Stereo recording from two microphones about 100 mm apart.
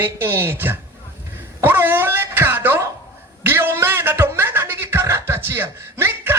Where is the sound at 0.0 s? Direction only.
25° right (ahead or behind).